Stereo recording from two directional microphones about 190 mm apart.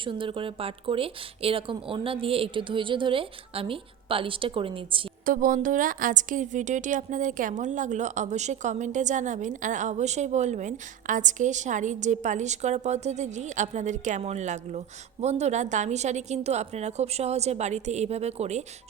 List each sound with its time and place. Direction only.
0.0 s a woman's voice: 25° right (ahead or behind)
5.2 s a woman's voice: 45° right (ahead or behind)